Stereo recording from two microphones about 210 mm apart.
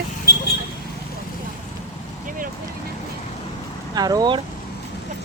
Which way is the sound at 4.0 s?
20° right (ahead or behind).